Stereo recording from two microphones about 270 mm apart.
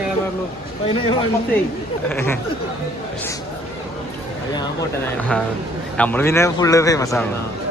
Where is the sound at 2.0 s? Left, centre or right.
Centre.